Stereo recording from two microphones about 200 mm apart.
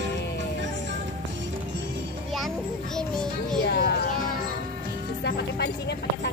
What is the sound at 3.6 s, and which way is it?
Music, 55° left (ahead or behind).